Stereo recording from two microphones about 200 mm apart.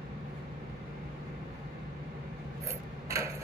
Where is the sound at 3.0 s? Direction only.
15° right (ahead or behind).